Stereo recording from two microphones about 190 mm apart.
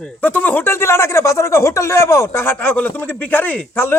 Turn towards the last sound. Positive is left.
turn(degrees=10)  # may be behind; listen again after turning